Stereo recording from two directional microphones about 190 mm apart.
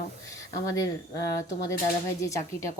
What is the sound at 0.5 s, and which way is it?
Speech, 20° left (ahead or behind).